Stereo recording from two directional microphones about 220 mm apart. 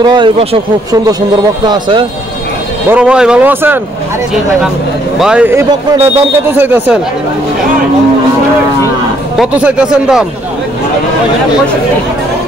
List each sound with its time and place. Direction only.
0.0 s speech: 20° right (ahead or behind)
1.7 s speech: 20° right (ahead or behind)
2.9 s speech: 5° right (ahead or behind)
5.2 s speech: 5° right (ahead or behind)
9.4 s speech: centre (ahead or behind)